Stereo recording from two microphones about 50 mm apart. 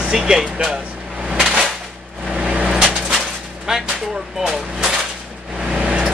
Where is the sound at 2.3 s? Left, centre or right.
Right.